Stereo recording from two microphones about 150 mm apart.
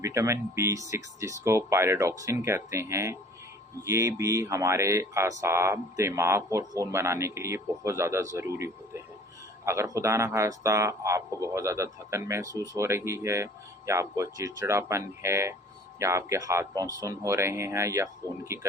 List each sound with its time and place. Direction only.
0.0 s speech: 20° right (ahead or behind)